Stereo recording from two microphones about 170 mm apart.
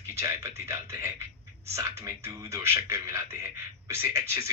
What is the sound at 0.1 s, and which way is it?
A man's voice, 15° right (ahead or behind).